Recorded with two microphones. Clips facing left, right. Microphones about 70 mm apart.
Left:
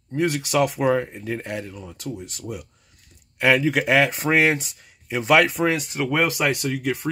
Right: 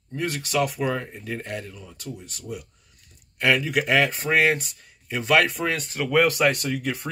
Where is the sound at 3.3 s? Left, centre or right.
Centre.